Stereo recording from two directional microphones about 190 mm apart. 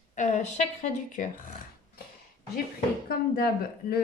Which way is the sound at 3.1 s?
55° left (ahead or behind).